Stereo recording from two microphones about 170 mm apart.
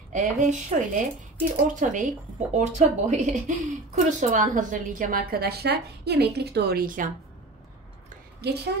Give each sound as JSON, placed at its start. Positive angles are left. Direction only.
{"t": 0.1, "sound": "a woman's voice", "side_deg": -45}
{"t": 8.4, "sound": "a woman's voice", "side_deg": -75}